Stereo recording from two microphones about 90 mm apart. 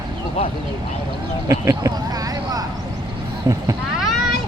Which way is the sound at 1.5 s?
40° right (ahead or behind).